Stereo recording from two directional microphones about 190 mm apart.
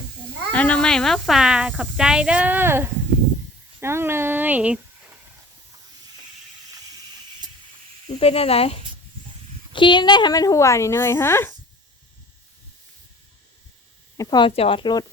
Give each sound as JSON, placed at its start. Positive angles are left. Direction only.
{"t": 0.5, "sound": "a woman's voice", "side_deg": 5}
{"t": 8.0, "sound": "a woman's voice", "side_deg": 35}
{"t": 14.2, "sound": "speech", "side_deg": 20}